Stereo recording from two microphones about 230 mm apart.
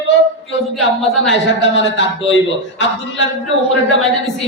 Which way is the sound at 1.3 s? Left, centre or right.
Left.